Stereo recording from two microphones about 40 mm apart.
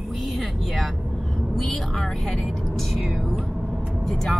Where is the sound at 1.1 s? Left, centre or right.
Centre.